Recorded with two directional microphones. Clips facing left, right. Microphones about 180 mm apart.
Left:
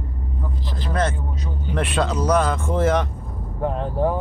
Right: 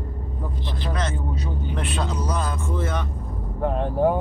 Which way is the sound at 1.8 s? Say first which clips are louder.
Left 8 dB; 85° left.